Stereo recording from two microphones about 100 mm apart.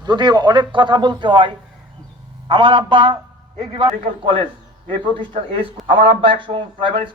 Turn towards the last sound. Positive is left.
turn(degrees=-55)  # may be behind; listen again after turning